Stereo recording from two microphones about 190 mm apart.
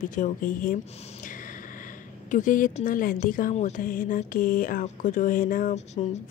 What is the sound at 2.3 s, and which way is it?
Speech, 45° left (ahead or behind).